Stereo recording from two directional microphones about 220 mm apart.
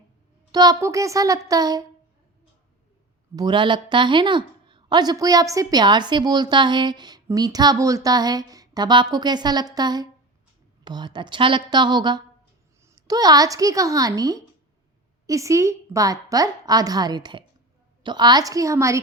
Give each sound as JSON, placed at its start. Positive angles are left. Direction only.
{"t": 0.5, "sound": "a woman's voice", "side_deg": -15}
{"t": 3.3, "sound": "a woman's voice", "side_deg": -20}